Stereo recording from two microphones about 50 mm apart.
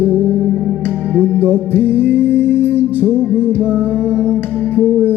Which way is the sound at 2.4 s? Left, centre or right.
Left.